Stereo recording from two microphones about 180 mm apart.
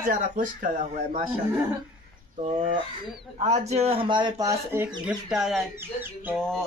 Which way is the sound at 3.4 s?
40° right (ahead or behind).